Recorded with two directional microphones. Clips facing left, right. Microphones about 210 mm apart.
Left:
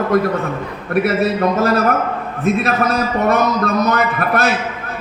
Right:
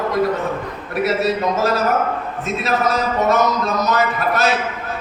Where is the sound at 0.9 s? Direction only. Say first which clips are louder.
Left 3 dB; 55° left (ahead or behind).